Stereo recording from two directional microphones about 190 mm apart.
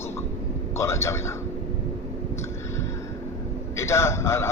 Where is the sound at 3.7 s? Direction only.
15° left (ahead or behind).